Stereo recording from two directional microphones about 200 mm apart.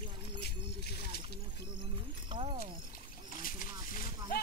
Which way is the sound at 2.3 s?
25° right (ahead or behind).